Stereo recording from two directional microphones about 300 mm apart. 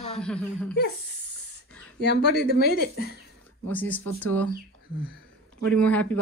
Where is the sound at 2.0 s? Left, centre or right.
Left.